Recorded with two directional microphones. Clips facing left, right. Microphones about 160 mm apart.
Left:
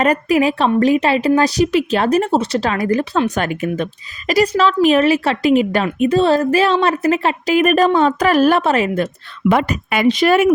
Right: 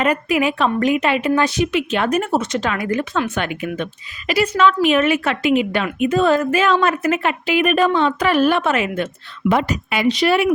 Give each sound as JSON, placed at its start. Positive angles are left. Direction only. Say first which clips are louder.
{"t": 0.0, "sound": "speech", "louder": "left 3 dB", "side_deg": 40}
{"t": 9.5, "sound": "speech", "louder": "left 2 dB", "side_deg": 55}